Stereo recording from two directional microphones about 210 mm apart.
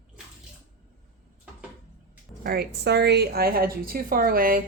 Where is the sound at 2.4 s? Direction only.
50° right (ahead or behind).